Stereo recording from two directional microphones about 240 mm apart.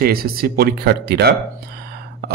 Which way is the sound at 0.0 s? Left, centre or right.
Right.